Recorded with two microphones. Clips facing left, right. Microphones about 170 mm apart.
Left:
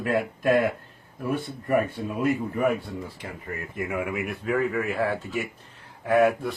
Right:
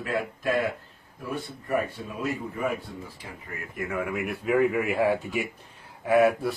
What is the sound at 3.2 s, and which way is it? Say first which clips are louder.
Speech: left 5 dB; 60° left (ahead or behind).